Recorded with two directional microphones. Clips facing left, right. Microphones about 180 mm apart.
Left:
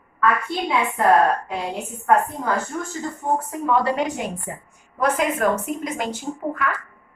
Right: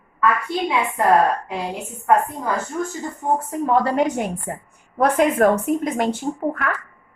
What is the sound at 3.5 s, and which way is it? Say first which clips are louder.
Speech: right 2 dB; 40° right (ahead or behind).